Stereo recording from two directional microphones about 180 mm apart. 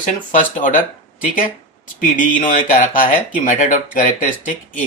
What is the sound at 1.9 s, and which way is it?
Speech, 45° left (ahead or behind).